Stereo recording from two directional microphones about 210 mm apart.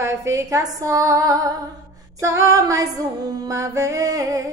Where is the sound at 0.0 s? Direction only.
15° right (ahead or behind).